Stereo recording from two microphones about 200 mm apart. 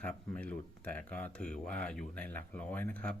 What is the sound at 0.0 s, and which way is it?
Speech, 5° left (ahead or behind).